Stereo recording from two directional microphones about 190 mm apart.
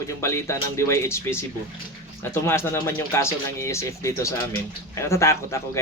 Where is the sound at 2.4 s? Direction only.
15° left (ahead or behind).